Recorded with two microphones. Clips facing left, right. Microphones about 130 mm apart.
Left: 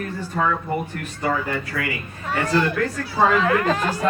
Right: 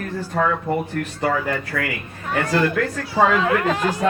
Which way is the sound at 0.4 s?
70° right (ahead or behind).